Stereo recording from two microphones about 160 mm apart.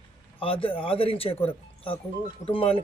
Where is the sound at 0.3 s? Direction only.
35° left (ahead or behind).